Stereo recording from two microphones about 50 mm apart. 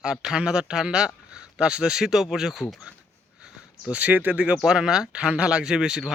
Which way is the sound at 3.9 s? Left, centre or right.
Right.